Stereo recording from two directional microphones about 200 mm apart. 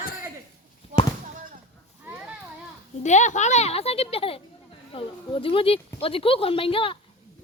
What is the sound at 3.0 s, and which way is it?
A child's voice, 35° left (ahead or behind).